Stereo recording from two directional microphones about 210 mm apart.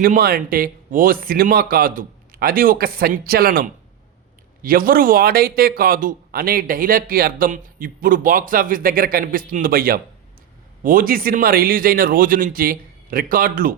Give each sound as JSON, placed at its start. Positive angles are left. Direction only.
{"t": 0.0, "sound": "speech", "side_deg": -45}